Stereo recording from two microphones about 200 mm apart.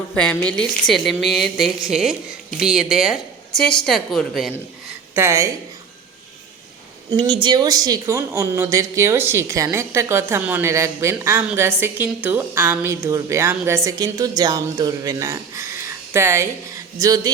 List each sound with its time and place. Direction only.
0.1 s a woman's voice: 5° left (ahead or behind)
5.1 s a woman's voice: 15° right (ahead or behind)
7.1 s a woman's voice: 25° right (ahead or behind)